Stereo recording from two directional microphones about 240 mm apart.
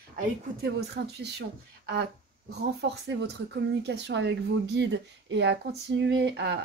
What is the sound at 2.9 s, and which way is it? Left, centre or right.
Speech, right.